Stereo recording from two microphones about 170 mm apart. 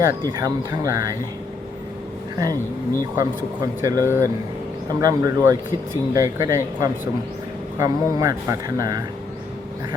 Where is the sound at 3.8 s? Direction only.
15° right (ahead or behind).